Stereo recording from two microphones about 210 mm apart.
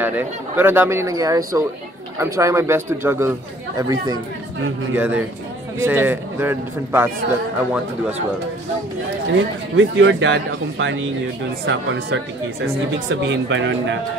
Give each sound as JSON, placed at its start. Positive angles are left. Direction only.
{"t": 0.0, "sound": "speech", "side_deg": -10}
{"t": 9.3, "sound": "speech", "side_deg": -65}